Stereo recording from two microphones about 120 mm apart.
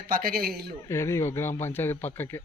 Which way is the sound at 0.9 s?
20° left (ahead or behind).